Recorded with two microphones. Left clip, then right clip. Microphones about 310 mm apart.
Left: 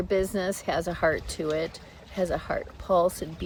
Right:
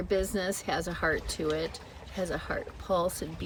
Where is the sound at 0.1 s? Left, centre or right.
Centre.